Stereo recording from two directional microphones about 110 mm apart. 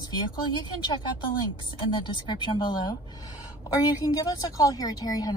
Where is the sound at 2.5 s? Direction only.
40° left (ahead or behind).